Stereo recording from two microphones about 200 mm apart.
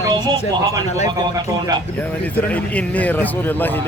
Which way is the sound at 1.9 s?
10° left (ahead or behind).